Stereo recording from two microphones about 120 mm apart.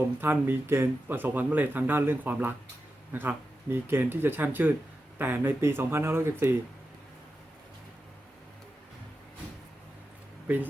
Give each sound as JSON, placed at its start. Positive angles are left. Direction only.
{"t": 0.2, "sound": "speech", "side_deg": -15}
{"t": 10.5, "sound": "speech", "side_deg": -10}